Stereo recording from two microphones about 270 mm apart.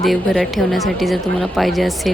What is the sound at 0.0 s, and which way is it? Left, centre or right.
A woman's voice, centre.